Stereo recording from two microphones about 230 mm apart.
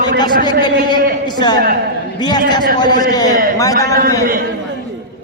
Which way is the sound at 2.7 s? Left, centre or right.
Centre.